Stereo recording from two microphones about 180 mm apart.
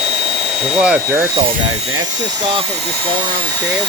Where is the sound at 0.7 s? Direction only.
5° right (ahead or behind).